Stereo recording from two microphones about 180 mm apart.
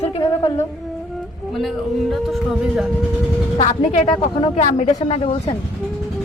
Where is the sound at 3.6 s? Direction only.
40° left (ahead or behind).